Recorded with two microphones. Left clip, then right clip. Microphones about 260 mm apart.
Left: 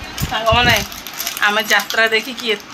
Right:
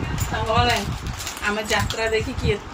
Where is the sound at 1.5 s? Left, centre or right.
Left.